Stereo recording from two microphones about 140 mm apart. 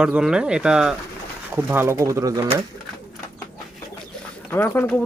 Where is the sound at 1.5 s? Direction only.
15° right (ahead or behind).